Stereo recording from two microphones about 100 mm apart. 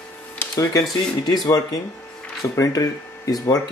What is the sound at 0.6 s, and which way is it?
Speech, 40° left (ahead or behind).